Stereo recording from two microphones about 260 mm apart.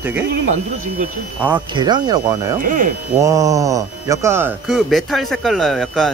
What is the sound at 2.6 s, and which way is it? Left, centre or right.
Speech, right.